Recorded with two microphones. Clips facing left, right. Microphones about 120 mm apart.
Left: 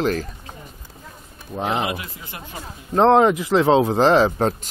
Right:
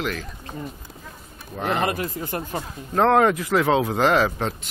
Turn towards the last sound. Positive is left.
turn(degrees=30)  # may be behind; listen again after turning